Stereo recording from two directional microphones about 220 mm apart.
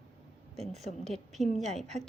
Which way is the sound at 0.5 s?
30° right (ahead or behind).